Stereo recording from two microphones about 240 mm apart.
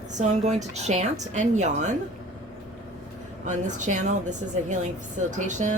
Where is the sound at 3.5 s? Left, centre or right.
Right.